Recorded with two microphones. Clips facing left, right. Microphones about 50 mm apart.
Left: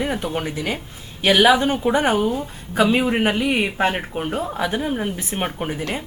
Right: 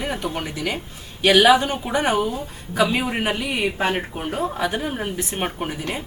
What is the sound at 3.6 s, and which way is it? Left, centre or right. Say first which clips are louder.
Speech: left 1 dB; left.